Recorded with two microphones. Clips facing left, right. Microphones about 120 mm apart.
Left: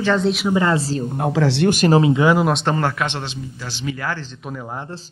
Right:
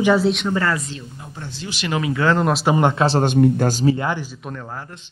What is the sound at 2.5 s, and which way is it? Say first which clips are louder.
Speech: right 1 dB; 5° right (ahead or behind).